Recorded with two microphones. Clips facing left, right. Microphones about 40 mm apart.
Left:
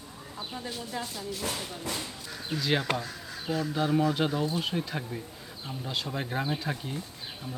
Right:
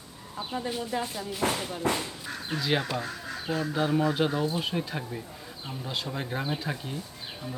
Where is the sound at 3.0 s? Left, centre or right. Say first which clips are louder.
Right 4 dB; right.